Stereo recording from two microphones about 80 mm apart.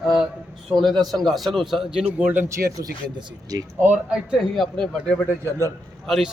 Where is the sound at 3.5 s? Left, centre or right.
Right.